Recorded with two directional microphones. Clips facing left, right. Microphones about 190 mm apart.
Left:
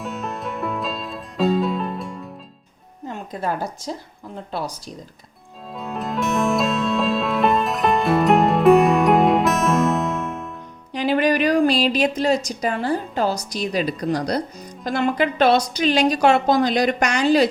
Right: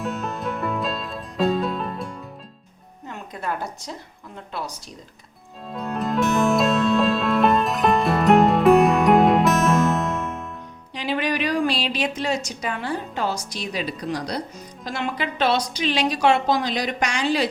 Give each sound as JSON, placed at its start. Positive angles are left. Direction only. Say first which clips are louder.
{"t": 0.0, "sound": "music", "louder": "right 1 dB", "side_deg": 0}
{"t": 3.1, "sound": "a sound", "louder": "left 4 dB", "side_deg": 30}
{"t": 5.7, "sound": "music", "louder": "right 2 dB", "side_deg": 0}
{"t": 10.9, "sound": "a woman's voice", "louder": "left 6 dB", "side_deg": 45}